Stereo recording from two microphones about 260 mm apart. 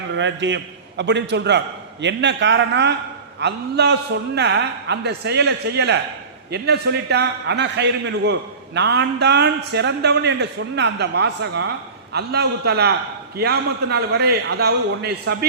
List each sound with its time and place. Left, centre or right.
0.1 s a man's voice: right